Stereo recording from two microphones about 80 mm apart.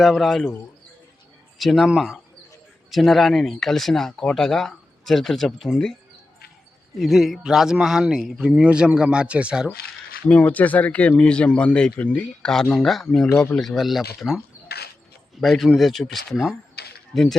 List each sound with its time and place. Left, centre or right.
0.0 s speech: centre
1.5 s speech: centre
7.0 s speech: centre
10.2 s speech: centre
13.7 s speech: centre